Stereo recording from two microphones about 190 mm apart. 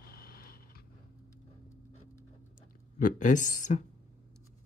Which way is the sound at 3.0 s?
40° left (ahead or behind).